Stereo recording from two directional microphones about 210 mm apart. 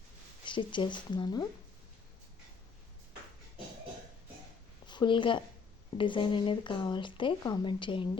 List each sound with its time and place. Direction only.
0.4 s speech: 25° left (ahead or behind)
4.9 s speech: 20° left (ahead or behind)